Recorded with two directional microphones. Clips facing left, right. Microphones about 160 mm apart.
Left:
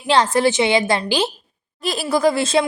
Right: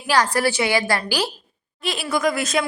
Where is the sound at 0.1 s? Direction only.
25° left (ahead or behind).